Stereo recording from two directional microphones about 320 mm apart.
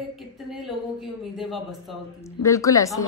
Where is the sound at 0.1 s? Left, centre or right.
Centre.